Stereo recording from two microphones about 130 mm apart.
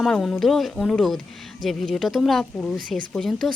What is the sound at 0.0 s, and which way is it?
Speech, 5° left (ahead or behind).